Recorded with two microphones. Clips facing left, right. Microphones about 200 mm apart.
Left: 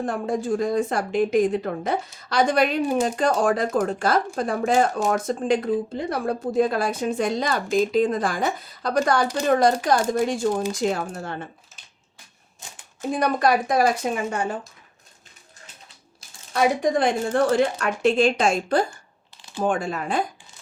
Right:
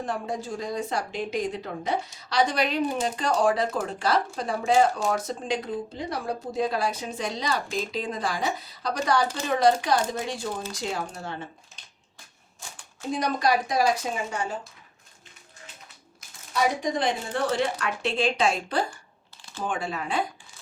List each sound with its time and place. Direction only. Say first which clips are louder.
0.0 s speech: left 6 dB; 50° left (ahead or behind)
13.0 s a woman's voice: left 5 dB; 55° left (ahead or behind)
16.5 s a woman's voice: left 5 dB; 55° left (ahead or behind)